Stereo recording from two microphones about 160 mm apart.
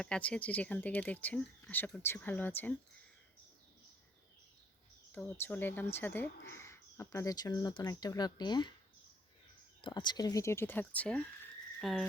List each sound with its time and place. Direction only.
0.0 s speech: 5° left (ahead or behind)
5.1 s speech: 10° left (ahead or behind); by 8.7 s 30° left (ahead or behind)
9.8 s speech: 25° left (ahead or behind); by 11.3 s 5° left (ahead or behind)
11.8 s frog: centre (ahead or behind)